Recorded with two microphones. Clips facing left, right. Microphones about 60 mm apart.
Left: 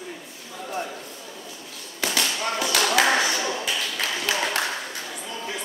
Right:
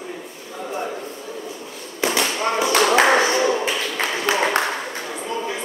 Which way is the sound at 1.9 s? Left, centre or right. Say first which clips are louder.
Right 5 dB; right.